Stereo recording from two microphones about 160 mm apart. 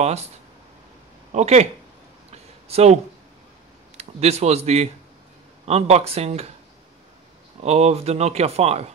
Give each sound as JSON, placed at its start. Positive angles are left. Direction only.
{"t": 0.0, "sound": "speech", "side_deg": -40}
{"t": 1.3, "sound": "speech", "side_deg": -45}
{"t": 2.3, "sound": "a sound", "side_deg": -40}
{"t": 3.9, "sound": "speech", "side_deg": -40}
{"t": 7.6, "sound": "speech", "side_deg": -40}